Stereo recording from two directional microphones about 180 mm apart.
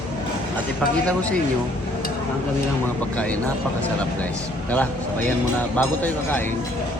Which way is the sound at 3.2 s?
10° left (ahead or behind).